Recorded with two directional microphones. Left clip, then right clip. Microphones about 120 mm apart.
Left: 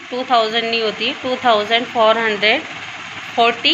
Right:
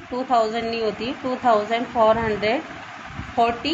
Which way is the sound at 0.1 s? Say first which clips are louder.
Left 5 dB; 5° right (ahead or behind).